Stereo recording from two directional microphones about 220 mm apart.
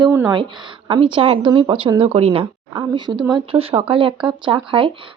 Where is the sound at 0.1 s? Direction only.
10° right (ahead or behind).